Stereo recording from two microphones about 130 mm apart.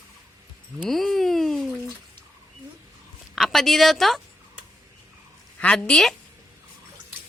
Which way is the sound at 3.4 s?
Centre (ahead or behind).